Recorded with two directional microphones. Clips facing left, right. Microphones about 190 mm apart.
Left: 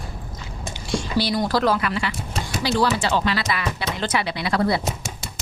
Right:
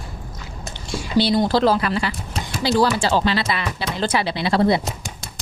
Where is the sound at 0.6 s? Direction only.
5° right (ahead or behind).